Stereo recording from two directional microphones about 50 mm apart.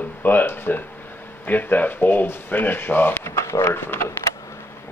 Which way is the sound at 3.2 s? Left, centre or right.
Left.